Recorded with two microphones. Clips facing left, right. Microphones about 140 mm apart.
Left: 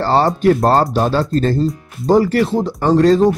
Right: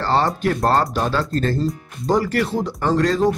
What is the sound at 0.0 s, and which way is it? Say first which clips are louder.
Speech: left 6 dB; 30° left (ahead or behind).